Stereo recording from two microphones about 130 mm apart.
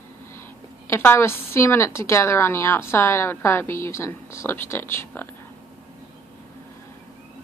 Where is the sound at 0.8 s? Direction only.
20° left (ahead or behind).